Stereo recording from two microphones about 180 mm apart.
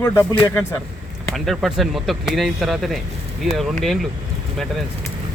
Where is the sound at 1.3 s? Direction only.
Centre (ahead or behind).